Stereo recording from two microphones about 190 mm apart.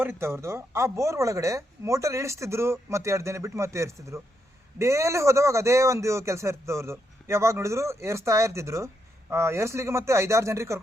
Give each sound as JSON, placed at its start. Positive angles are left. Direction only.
{"t": 0.0, "sound": "speech", "side_deg": -10}